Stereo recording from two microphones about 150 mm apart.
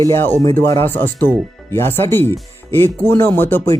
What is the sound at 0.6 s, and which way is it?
Speech, 20° left (ahead or behind).